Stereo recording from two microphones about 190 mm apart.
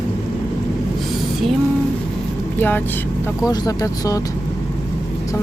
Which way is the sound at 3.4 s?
20° left (ahead or behind).